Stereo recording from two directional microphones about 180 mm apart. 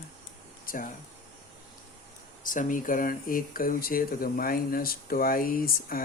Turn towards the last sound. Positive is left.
turn(degrees=55)  # may be behind; listen again after turning